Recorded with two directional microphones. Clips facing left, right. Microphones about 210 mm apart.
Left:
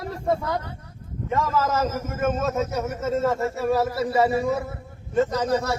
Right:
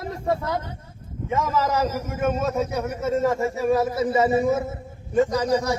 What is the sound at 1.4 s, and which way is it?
Speech, 15° right (ahead or behind).